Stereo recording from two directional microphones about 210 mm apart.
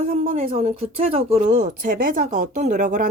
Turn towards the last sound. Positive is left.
turn(degrees=-35)  # may be behind; listen again after turning